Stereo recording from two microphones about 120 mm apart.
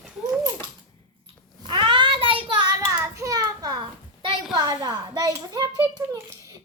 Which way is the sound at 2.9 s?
25° right (ahead or behind).